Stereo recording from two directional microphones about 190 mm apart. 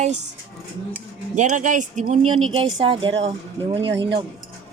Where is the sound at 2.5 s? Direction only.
25° right (ahead or behind).